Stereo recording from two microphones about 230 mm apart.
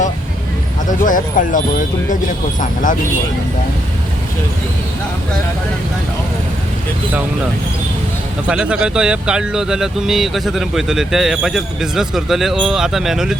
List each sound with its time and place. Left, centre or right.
0.9 s speech: left
8.4 s speech: centre